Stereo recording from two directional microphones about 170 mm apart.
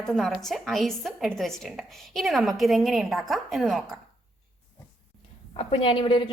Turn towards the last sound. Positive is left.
turn(degrees=30)  # may be behind; listen again after turning